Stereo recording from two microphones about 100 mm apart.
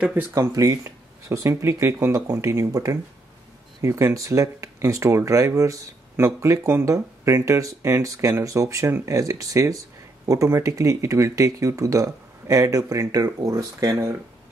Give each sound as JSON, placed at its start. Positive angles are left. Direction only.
{"t": 0.3, "sound": "speech", "side_deg": -35}